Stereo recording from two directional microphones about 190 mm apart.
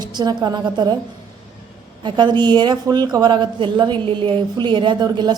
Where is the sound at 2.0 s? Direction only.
25° right (ahead or behind).